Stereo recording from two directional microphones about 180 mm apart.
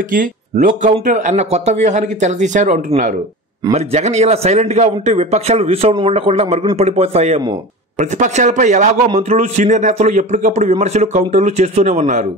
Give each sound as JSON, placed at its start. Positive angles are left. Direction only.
{"t": 0.1, "sound": "a man's voice", "side_deg": -50}